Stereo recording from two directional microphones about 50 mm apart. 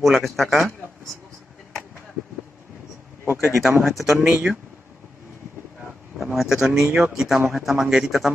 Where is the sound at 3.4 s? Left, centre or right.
Centre.